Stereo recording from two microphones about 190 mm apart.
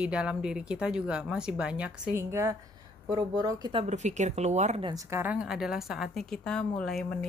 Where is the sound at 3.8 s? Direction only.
35° right (ahead or behind).